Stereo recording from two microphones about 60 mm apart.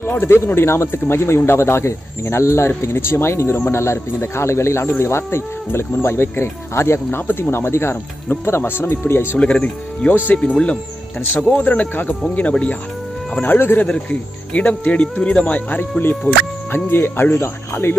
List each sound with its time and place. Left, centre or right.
0.0 s speech: left
9.4 s speech: centre
13.4 s speech: left
13.8 s speech: left